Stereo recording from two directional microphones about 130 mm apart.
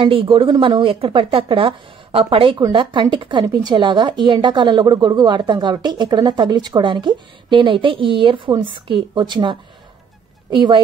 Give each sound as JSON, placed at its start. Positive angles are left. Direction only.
{"t": 0.0, "sound": "speech", "side_deg": -40}